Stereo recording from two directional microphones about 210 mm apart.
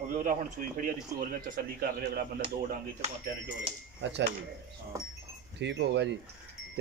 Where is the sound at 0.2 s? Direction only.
40° right (ahead or behind).